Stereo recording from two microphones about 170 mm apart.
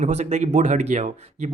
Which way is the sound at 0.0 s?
40° right (ahead or behind).